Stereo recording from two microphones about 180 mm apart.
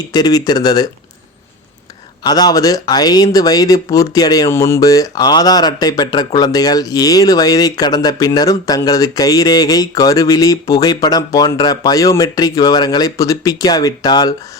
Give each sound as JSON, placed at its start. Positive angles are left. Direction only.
{"t": 0.1, "sound": "speech", "side_deg": 20}
{"t": 2.2, "sound": "speech", "side_deg": 20}